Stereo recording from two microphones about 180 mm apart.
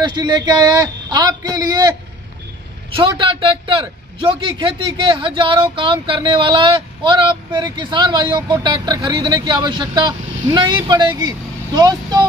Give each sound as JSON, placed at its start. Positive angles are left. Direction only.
{"t": 0.0, "sound": "speech", "side_deg": -25}